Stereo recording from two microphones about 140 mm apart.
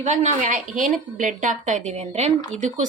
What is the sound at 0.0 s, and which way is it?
Speech, 55° right (ahead or behind).